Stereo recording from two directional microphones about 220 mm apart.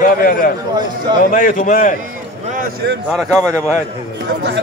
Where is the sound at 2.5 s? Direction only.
45° right (ahead or behind).